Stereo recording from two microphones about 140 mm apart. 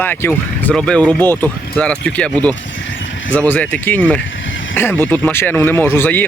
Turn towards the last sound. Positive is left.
turn(degrees=15)  # may be behind; listen again after turning